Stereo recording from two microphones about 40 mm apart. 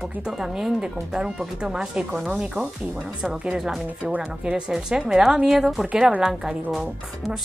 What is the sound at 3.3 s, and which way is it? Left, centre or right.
Speech, right.